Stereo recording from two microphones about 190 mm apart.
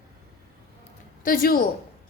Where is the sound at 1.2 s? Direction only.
45° left (ahead or behind).